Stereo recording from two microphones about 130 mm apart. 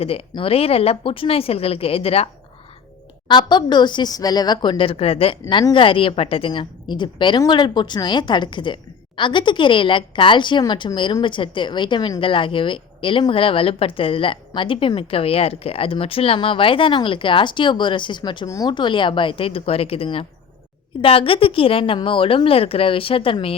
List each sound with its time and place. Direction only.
0.0 s speech: 50° left (ahead or behind)
3.2 s a woman's voice: 35° left (ahead or behind)